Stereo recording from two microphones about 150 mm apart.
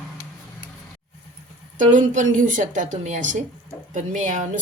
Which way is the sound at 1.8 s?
60° right (ahead or behind).